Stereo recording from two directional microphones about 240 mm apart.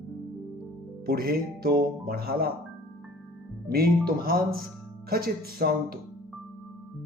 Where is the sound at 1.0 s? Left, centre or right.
Right.